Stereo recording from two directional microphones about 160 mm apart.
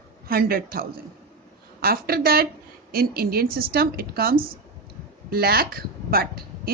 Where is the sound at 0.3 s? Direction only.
65° right (ahead or behind).